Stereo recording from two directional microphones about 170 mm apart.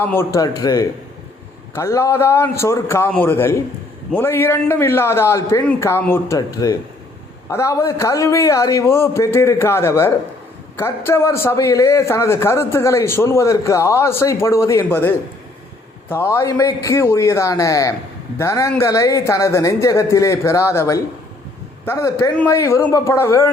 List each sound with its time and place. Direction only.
0.0 s a man's voice: 15° left (ahead or behind)